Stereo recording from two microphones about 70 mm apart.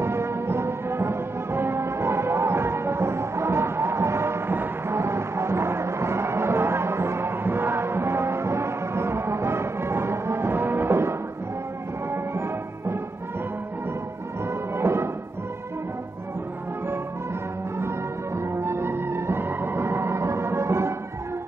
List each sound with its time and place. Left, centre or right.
0.0 s music: right
14.5 s music: right
17.7 s music: right